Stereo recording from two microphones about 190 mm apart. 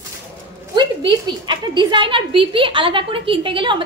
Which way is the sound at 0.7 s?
25° right (ahead or behind).